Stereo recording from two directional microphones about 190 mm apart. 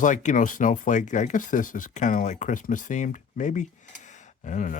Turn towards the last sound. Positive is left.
turn(degrees=40)  # may be behind; listen again after turning